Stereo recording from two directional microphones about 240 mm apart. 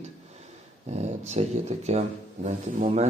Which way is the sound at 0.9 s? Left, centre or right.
Right.